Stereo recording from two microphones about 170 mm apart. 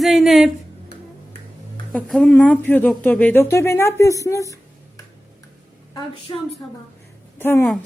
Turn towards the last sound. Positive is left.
turn(degrees=15)  # may be behind; listen again after turning